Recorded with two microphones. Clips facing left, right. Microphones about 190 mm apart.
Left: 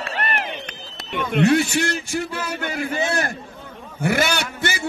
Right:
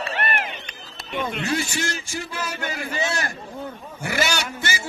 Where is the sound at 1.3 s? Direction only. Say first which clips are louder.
Left 13 dB; 60° left (ahead or behind).